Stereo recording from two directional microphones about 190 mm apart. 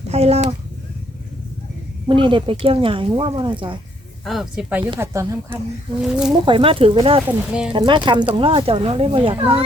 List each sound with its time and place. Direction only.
0.1 s speech: 35° right (ahead or behind)
2.0 s speech: 25° right (ahead or behind)
4.3 s speech: centre (ahead or behind)
4.9 s speech: 15° right (ahead or behind)
6.0 s speech: 5° right (ahead or behind)
6.4 s speech: 30° right (ahead or behind)
7.3 s speech: 5° right (ahead or behind)
7.7 s speech: 25° right (ahead or behind)